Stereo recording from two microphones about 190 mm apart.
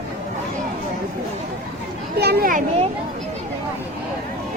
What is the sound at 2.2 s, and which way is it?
Children playing, 55° right (ahead or behind).